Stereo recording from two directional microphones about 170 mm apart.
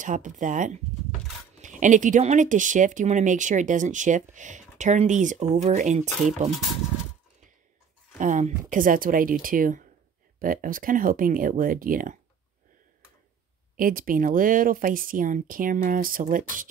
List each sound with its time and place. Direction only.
0.0 s speech: 50° right (ahead or behind)
8.2 s speech: 50° right (ahead or behind)
13.7 s speech: 55° right (ahead or behind)